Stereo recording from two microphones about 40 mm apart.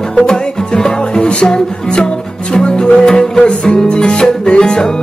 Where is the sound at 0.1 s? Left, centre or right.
Centre.